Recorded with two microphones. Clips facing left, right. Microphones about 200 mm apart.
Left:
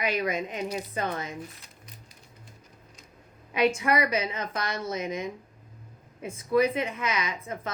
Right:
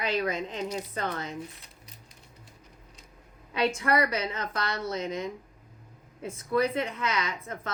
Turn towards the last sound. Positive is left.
turn(degrees=20)  # may be behind; listen again after turning